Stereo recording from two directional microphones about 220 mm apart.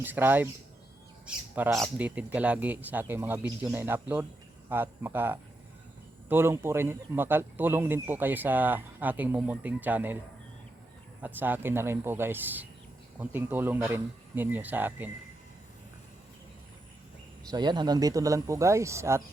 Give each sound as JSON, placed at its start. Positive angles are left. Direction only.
{"t": 0.0, "sound": "a man's voice", "side_deg": -10}
{"t": 1.5, "sound": "a man's voice", "side_deg": -10}
{"t": 11.2, "sound": "a man's voice", "side_deg": -10}
{"t": 17.5, "sound": "a man's voice", "side_deg": -20}